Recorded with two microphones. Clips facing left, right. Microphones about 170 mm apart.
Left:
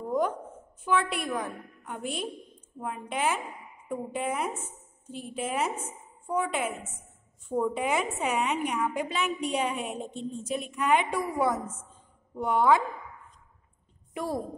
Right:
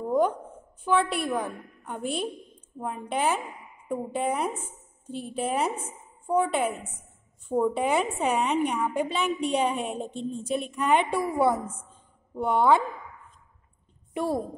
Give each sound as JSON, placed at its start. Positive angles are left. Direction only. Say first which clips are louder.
{"t": 0.8, "sound": "a woman's voice", "louder": "right 3 dB", "side_deg": -30}
{"t": 14.1, "sound": "a woman's voice", "louder": "right 4 dB", "side_deg": -25}